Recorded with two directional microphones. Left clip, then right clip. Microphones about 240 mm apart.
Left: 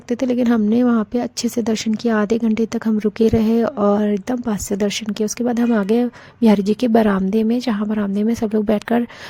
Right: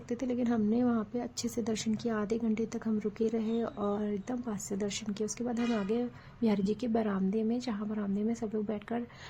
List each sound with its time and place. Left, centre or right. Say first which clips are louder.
0.1 s a woman's voice: left 15 dB; left